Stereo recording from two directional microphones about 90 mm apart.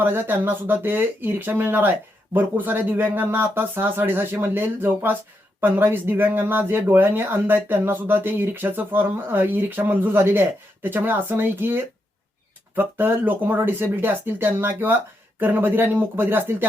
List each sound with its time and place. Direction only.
0.0 s speech: 25° right (ahead or behind)